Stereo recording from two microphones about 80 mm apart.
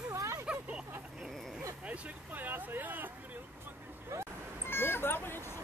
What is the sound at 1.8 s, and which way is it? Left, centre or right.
Vehicle, centre.